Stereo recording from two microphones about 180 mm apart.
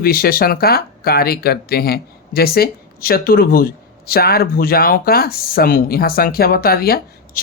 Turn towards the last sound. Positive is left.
turn(degrees=60)  # may be behind; listen again after turning